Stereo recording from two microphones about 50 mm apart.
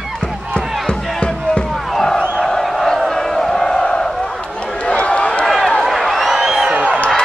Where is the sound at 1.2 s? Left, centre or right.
Centre.